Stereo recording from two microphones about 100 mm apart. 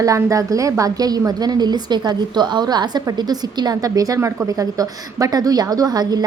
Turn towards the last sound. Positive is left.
turn(degrees=-40)  # may be behind; listen again after turning